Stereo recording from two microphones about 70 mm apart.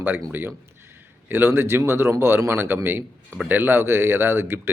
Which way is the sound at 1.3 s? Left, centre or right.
Right.